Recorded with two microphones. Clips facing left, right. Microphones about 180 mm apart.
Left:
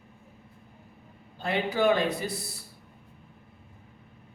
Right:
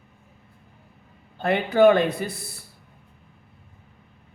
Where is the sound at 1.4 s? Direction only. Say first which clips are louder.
Right 8 dB; 60° right (ahead or behind).